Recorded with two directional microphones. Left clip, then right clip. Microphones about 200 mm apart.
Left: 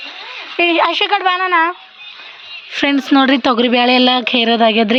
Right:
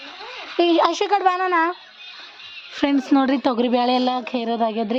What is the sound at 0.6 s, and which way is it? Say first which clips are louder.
Speech: left 4 dB; 15° right (ahead or behind).